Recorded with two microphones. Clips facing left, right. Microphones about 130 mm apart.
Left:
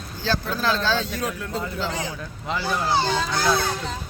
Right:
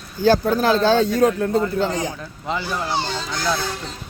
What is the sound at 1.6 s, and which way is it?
Speech, 50° right (ahead or behind).